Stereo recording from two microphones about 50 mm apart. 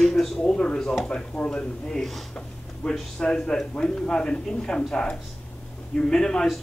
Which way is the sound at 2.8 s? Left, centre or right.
Left.